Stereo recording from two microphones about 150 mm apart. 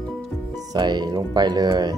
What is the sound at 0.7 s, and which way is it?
Speech, 30° right (ahead or behind).